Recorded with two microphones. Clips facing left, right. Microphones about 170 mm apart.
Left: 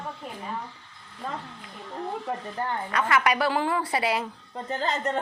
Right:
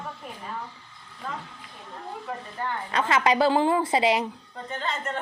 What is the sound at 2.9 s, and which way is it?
A woman's voice, 25° right (ahead or behind).